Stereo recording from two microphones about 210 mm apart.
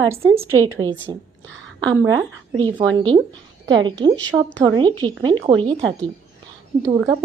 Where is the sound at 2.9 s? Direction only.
20° right (ahead or behind).